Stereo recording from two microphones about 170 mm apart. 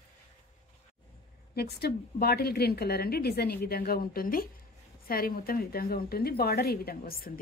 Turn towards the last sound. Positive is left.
turn(degrees=60)  # may be behind; listen again after turning